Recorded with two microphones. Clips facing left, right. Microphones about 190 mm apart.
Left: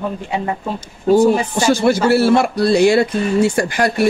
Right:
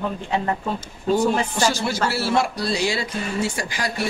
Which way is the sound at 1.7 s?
55° left (ahead or behind).